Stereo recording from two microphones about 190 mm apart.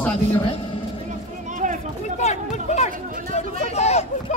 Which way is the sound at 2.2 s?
35° left (ahead or behind).